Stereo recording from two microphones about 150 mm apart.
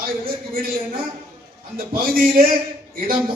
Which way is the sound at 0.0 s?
80° right.